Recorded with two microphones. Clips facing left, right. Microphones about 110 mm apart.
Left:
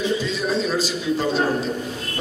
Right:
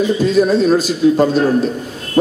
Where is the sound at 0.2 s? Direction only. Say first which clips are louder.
Right 11 dB; 50° right (ahead or behind).